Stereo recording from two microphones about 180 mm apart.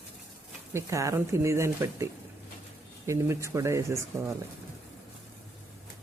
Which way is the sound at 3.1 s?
15° right (ahead or behind).